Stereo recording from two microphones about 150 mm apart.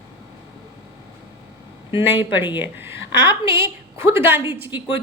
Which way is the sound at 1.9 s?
15° right (ahead or behind).